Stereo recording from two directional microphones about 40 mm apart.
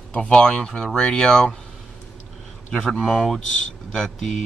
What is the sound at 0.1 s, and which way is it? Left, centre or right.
Speech, left.